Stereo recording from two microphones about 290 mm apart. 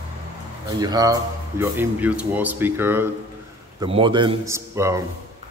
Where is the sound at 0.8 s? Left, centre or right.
Centre.